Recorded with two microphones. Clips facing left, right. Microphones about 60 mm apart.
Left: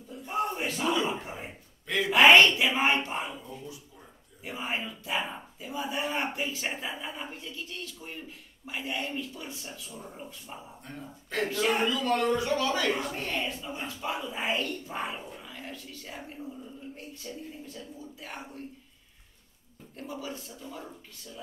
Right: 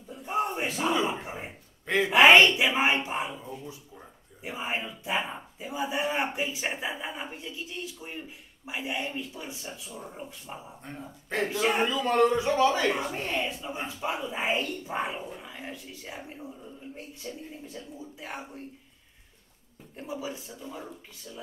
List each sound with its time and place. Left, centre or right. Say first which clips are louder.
0.1 s battle cry: right 2 dB; centre
1.2 s speech: right 2 dB; centre
2.5 s speech: right 1 dB; centre
3.4 s speech: right 2 dB; right
10.8 s speech: right 1 dB; right
20.0 s speech: right 2 dB; centre